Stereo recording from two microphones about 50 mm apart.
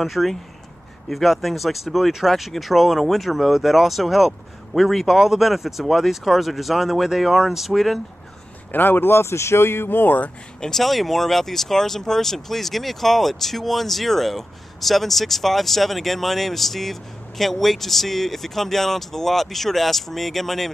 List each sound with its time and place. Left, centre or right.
0.0 s speech: centre
8.7 s speech: left
10.6 s speech: centre